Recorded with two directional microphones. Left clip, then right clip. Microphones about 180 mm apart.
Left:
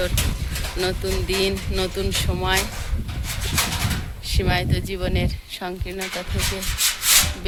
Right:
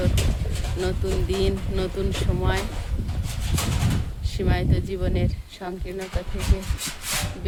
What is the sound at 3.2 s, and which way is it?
Pigeon, 20° right (ahead or behind).